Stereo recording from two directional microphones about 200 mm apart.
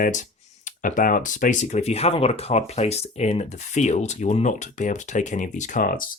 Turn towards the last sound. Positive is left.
turn(degrees=45)  # may be behind; listen again after turning